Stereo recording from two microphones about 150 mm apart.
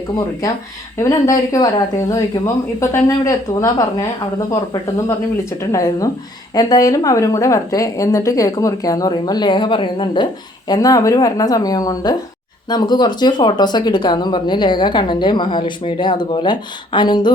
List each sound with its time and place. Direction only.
0.9 s speech: 20° left (ahead or behind)